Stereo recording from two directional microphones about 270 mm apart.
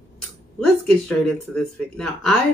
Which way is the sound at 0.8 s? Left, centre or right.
Centre.